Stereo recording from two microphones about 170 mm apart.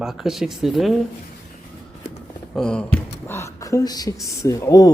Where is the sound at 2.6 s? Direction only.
5° left (ahead or behind).